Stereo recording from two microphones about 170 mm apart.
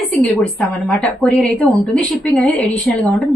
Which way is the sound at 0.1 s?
5° left (ahead or behind).